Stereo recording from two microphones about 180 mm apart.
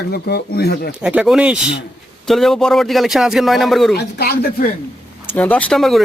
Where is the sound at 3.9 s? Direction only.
60° left (ahead or behind).